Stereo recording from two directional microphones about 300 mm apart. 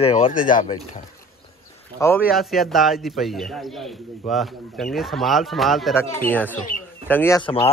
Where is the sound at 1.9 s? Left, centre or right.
Centre.